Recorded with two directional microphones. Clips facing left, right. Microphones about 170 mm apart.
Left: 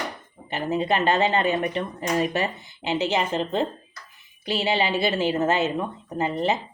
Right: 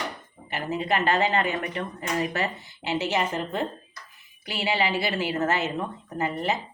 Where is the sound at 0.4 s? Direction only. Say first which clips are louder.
Left 4 dB; 20° left (ahead or behind).